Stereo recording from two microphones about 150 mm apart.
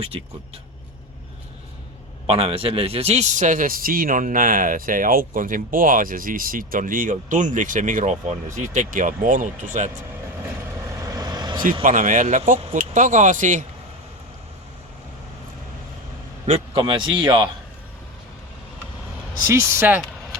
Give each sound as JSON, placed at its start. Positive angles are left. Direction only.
{"t": 0.1, "sound": "a man's voice", "side_deg": -35}
{"t": 2.2, "sound": "a man's voice", "side_deg": -40}
{"t": 11.0, "sound": "vehicle", "side_deg": -25}
{"t": 11.8, "sound": "a man's voice", "side_deg": -60}
{"t": 16.5, "sound": "a man's voice", "side_deg": -35}
{"t": 19.5, "sound": "speech", "side_deg": -15}